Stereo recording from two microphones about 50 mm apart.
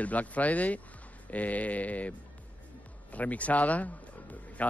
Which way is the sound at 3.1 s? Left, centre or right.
Left.